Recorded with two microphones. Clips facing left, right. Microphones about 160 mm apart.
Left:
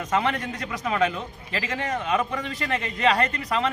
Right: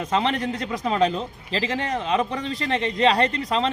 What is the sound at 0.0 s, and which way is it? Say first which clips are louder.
A man's voice: right 2 dB; 25° right (ahead or behind).